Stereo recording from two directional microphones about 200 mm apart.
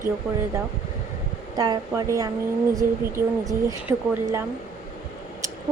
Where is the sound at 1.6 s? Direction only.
15° right (ahead or behind).